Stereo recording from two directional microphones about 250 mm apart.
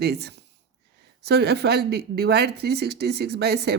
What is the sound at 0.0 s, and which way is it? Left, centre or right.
A woman's voice, right.